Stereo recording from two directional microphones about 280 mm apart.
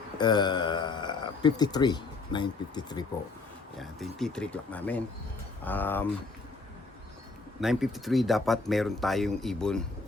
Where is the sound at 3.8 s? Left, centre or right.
Centre.